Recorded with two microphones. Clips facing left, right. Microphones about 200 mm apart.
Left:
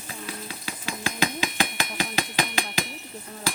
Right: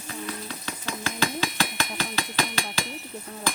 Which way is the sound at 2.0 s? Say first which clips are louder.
Left 2 dB; 15° left (ahead or behind).